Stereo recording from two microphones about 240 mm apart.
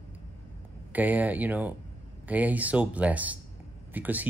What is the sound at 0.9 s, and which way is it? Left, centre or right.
Speech, centre.